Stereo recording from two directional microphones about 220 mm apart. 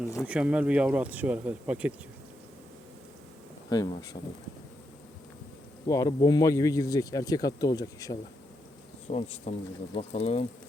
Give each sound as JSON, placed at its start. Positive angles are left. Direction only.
{"t": 0.3, "sound": "speech", "side_deg": -5}
{"t": 3.7, "sound": "speech", "side_deg": 15}
{"t": 5.9, "sound": "speech", "side_deg": 15}
{"t": 9.0, "sound": "speech", "side_deg": 30}